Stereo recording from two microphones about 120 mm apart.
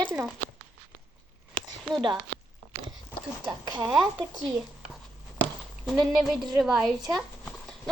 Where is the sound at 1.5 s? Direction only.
40° right (ahead or behind).